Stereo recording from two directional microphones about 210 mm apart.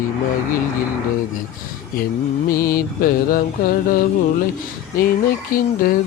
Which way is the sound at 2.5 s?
45° left (ahead or behind).